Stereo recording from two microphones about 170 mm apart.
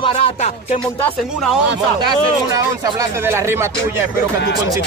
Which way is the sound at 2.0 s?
20° right (ahead or behind).